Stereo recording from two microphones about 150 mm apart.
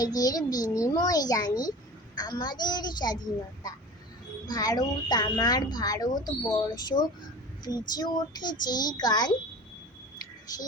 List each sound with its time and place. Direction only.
0.0 s speech: 25° left (ahead or behind)
4.4 s speech: 25° left (ahead or behind)